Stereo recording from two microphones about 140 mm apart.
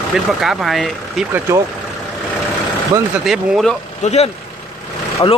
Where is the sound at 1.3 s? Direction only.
20° right (ahead or behind).